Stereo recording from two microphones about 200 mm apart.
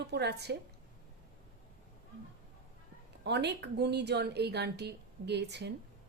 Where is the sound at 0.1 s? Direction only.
55° right (ahead or behind).